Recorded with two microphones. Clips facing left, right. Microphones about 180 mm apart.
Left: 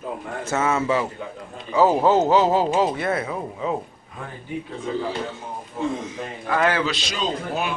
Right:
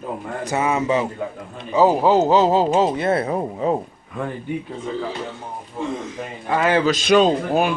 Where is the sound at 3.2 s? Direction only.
40° right (ahead or behind).